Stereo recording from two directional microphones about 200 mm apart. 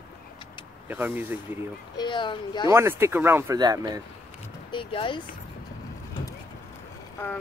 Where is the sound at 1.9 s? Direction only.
25° left (ahead or behind).